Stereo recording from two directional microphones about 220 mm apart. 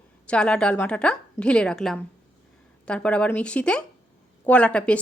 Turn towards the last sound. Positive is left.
turn(degrees=5)  # may be behind; listen again after turning